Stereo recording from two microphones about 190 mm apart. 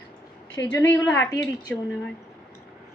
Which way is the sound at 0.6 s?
15° left (ahead or behind).